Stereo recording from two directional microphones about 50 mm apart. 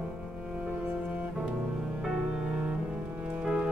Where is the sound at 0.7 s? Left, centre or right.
Right.